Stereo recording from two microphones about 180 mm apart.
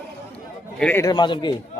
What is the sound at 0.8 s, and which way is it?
Speech, 10° left (ahead or behind).